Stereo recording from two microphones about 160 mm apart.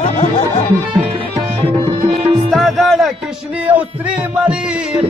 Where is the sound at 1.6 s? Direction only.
30° right (ahead or behind).